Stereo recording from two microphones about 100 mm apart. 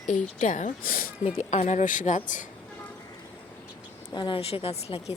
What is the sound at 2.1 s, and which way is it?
Speech, 90° left.